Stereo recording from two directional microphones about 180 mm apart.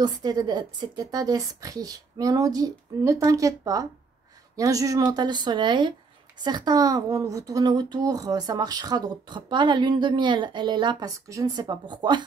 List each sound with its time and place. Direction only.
0.0 s speech: 20° right (ahead or behind)